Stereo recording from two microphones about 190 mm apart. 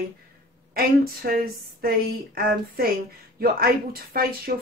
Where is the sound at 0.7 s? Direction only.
50° right (ahead or behind).